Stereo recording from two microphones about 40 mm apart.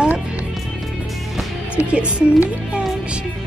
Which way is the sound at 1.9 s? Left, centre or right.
Right.